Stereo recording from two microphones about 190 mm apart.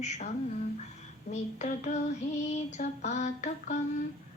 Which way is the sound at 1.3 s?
40° left (ahead or behind).